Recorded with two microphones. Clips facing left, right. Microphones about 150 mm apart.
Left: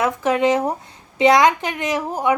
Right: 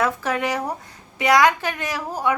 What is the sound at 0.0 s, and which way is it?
A woman's voice, 20° left (ahead or behind).